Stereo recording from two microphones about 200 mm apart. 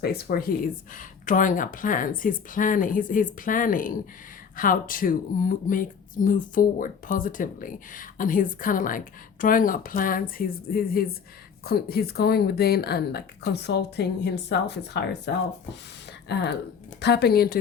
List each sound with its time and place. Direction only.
0.0 s speech: 50° left (ahead or behind)